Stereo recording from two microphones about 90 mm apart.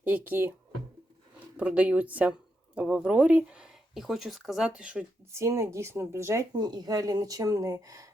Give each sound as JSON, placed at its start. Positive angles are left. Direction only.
{"t": 0.0, "sound": "speech", "side_deg": -15}
{"t": 1.5, "sound": "speech", "side_deg": -15}
{"t": 5.3, "sound": "speech", "side_deg": -35}
{"t": 6.5, "sound": "speech", "side_deg": -50}